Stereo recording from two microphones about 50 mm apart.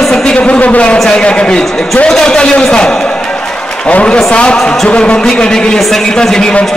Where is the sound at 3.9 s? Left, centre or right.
Left.